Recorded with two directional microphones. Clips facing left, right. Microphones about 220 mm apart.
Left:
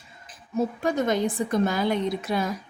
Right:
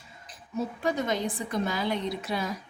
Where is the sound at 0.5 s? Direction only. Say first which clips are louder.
Left 4 dB; 50° left (ahead or behind).